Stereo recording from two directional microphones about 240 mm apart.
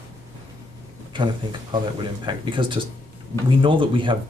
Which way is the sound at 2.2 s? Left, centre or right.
Centre.